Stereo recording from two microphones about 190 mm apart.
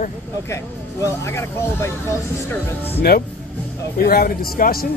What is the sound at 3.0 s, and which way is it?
A man's voice, 55° left (ahead or behind).